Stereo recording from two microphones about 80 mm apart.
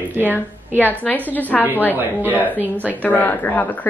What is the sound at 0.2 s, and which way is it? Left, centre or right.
Speech, left.